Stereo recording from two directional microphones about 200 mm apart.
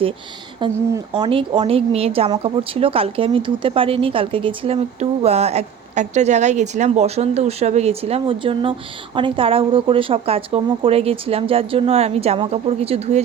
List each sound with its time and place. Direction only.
0.6 s speech: 15° right (ahead or behind)
1.1 s speech: 25° right (ahead or behind)